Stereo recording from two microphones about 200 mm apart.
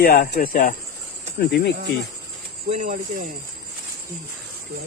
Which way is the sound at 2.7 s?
40° right (ahead or behind).